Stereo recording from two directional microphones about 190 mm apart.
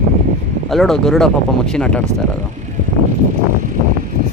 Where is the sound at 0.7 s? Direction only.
Centre (ahead or behind).